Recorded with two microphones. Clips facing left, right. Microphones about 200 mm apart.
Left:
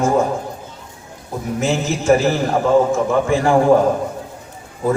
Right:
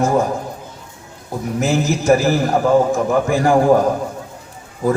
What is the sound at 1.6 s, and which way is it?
Speech, 35° right (ahead or behind).